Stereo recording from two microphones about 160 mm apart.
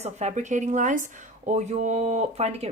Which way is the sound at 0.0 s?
45° right (ahead or behind).